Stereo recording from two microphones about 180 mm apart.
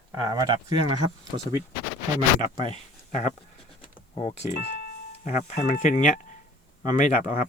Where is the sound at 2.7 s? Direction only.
40° left (ahead or behind).